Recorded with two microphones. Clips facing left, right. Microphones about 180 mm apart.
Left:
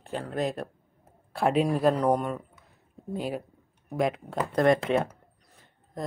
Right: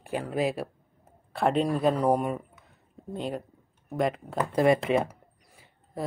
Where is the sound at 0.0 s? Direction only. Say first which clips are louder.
Right 2 dB; 10° right (ahead or behind).